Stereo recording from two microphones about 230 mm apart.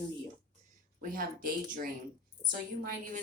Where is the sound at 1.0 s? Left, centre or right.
Right.